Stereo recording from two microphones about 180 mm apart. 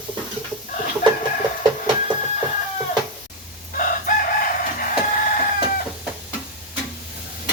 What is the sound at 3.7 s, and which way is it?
Chicken, 50° left (ahead or behind).